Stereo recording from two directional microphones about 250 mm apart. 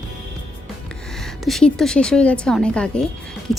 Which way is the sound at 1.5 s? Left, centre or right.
Centre.